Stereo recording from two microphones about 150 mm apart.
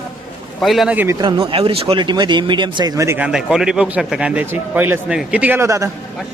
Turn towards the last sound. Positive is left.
turn(degrees=-20)  # may be behind; listen again after turning